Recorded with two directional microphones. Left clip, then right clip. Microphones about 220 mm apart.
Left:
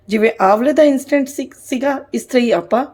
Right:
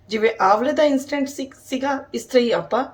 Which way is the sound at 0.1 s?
35° left (ahead or behind).